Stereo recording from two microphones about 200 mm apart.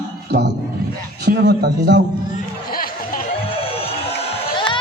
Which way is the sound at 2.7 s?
45° left (ahead or behind).